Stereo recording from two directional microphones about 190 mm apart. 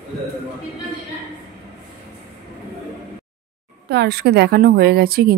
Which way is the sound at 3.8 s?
60° right (ahead or behind).